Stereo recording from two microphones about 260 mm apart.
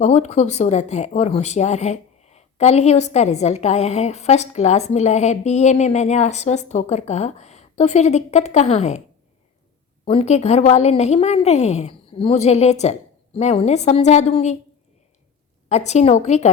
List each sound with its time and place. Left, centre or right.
0.0 s speech: left
10.1 s speech: left
15.7 s speech: left